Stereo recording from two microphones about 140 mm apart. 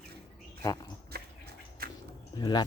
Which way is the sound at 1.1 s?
90° right.